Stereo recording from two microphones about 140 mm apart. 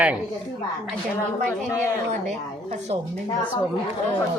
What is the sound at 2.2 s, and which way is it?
Speech, 55° right (ahead or behind).